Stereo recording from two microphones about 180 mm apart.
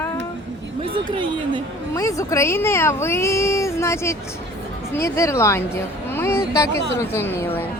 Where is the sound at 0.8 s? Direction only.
30° right (ahead or behind).